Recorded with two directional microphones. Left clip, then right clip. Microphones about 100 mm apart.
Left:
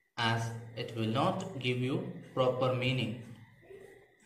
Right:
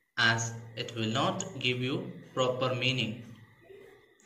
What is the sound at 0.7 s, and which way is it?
A woman's voice, 30° right (ahead or behind).